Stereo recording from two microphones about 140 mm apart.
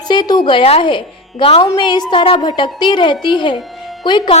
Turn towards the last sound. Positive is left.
turn(degrees=35)  # may be behind; listen again after turning